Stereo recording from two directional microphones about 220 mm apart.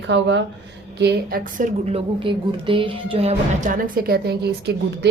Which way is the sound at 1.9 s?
25° right (ahead or behind).